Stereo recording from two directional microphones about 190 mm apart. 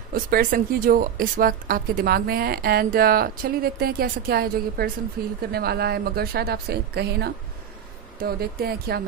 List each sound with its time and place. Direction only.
0.1 s a woman's voice: 50° right (ahead or behind)